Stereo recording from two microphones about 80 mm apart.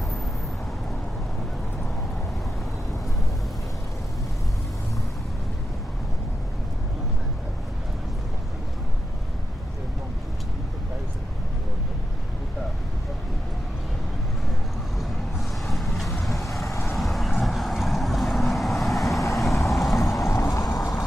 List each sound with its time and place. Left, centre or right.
15.0 s vehicle: centre
20.2 s vehicle: left